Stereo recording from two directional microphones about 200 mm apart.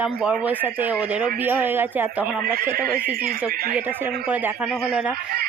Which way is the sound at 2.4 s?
50° right (ahead or behind).